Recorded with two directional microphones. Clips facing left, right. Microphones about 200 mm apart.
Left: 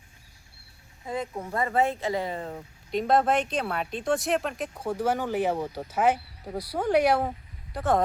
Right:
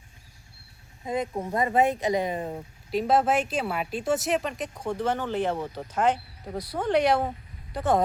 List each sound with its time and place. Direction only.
1.0 s speech: 20° right (ahead or behind)
2.9 s speech: 5° right (ahead or behind)